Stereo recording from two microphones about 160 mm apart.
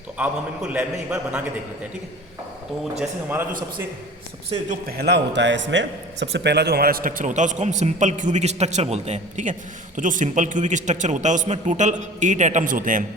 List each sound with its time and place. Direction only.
0.2 s a man's voice: 10° right (ahead or behind)
3.0 s a man's voice: 10° right (ahead or behind)
4.9 s a man's voice: 85° right; by 13.1 s 55° right (ahead or behind)